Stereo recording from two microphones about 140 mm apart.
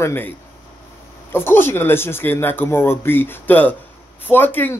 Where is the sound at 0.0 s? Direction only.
15° left (ahead or behind).